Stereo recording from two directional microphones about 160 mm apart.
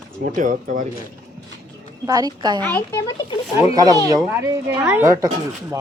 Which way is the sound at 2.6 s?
15° left (ahead or behind).